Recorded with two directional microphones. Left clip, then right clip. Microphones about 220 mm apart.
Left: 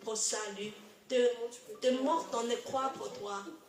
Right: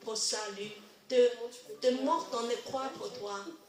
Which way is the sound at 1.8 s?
30° left (ahead or behind).